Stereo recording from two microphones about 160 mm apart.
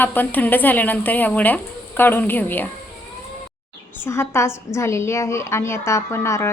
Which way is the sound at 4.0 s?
15° left (ahead or behind).